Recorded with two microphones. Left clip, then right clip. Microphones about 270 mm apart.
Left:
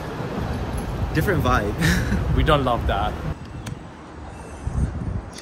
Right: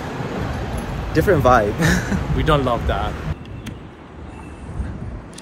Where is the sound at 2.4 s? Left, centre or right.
Centre.